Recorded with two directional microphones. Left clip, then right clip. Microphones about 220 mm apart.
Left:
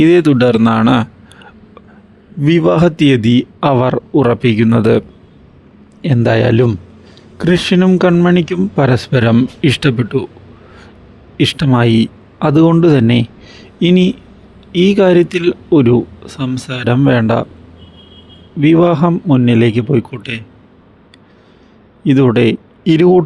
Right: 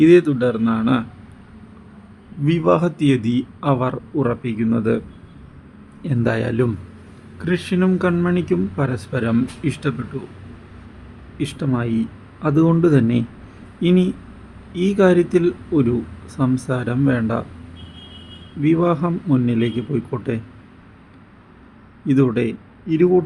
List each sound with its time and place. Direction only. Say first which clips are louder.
0.0 s speech: left 4 dB; 40° left (ahead or behind)
2.4 s a man's voice: left 6 dB; 35° left (ahead or behind)
11.3 s a man's voice: left 11 dB; 35° left (ahead or behind)
18.6 s a man's voice: left 8 dB; 30° left (ahead or behind)
22.0 s speech: left 8 dB; 35° left (ahead or behind)